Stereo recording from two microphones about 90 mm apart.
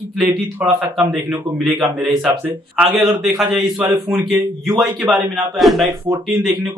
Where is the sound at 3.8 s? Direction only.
20° right (ahead or behind).